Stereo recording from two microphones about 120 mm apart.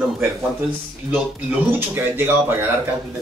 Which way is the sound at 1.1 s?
15° right (ahead or behind).